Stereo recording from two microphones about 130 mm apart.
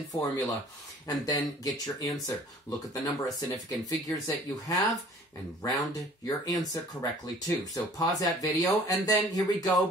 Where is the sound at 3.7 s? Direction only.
25° left (ahead or behind).